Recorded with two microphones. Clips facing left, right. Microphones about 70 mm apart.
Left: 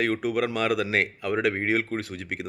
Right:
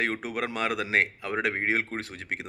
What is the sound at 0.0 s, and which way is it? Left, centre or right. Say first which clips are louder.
Speech: left 5 dB; right.